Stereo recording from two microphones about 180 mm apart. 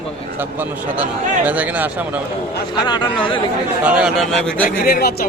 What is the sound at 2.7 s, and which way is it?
Speech, 25° left (ahead or behind).